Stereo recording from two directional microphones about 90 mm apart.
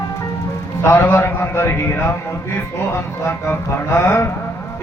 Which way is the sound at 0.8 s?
25° left (ahead or behind).